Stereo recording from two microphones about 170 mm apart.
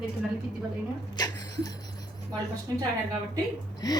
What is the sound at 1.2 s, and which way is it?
Speech, 20° left (ahead or behind).